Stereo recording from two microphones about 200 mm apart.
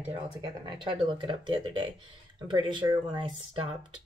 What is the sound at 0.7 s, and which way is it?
Speech, 25° right (ahead or behind).